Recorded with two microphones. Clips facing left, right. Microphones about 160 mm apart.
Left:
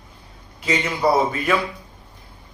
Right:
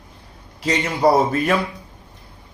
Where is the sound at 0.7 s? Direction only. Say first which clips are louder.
Right 3 dB; 35° right (ahead or behind).